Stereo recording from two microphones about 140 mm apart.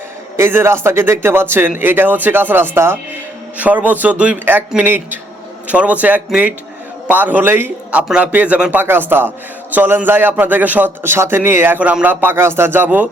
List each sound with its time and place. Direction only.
0.3 s a man's voice: 15° right (ahead or behind)